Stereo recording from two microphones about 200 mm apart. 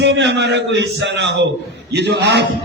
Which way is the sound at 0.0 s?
60° right (ahead or behind).